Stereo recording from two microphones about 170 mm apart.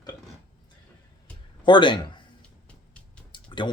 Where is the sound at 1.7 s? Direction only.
30° left (ahead or behind).